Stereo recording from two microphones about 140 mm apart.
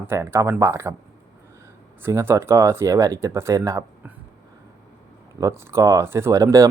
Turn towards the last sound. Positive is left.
turn(degrees=-25)  # may be behind; listen again after turning